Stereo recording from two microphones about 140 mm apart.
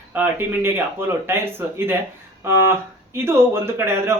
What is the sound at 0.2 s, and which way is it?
Speech, 15° right (ahead or behind).